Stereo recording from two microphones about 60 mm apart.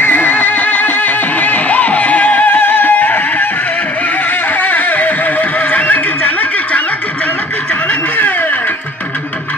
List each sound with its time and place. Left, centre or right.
0.0 s music: left
4.5 s music: left
7.9 s a sound: left